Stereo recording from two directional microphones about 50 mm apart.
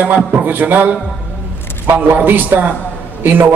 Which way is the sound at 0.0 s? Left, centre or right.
Right.